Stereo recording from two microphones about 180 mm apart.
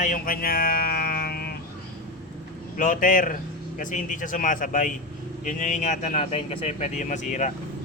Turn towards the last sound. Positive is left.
turn(degrees=40)  # may be behind; listen again after turning